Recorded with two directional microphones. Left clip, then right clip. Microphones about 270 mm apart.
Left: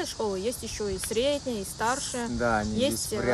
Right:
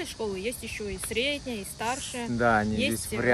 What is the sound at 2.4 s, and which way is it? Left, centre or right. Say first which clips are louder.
Speech: right 3 dB; right.